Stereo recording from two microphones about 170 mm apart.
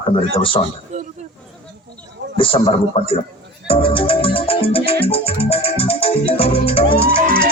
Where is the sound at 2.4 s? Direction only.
30° left (ahead or behind).